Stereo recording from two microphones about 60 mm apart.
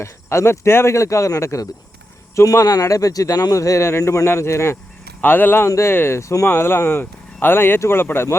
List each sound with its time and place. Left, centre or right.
0.0 s speech: left
5.2 s speech: left
5.6 s speech: left
6.5 s speech: left